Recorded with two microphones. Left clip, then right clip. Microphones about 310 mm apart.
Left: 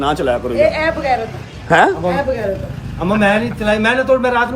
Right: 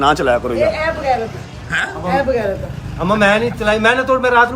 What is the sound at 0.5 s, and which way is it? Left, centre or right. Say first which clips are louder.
Speech: left 2 dB; left.